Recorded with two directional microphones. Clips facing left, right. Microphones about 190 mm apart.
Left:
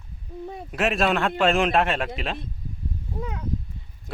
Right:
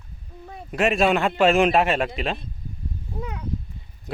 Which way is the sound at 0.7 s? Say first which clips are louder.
Right 3 dB; centre (ahead or behind).